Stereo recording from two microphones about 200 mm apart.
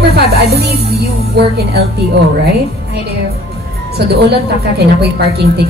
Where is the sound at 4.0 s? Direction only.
55° right (ahead or behind).